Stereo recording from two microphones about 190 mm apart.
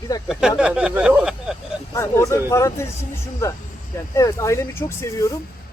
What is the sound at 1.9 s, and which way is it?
Speech, 15° left (ahead or behind).